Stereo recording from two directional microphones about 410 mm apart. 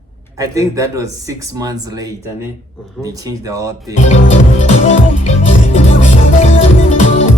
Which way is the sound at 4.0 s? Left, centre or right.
Centre.